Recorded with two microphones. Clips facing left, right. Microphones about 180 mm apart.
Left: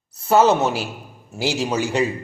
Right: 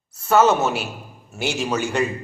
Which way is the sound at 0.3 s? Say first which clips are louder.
Left 1 dB; 30° left (ahead or behind).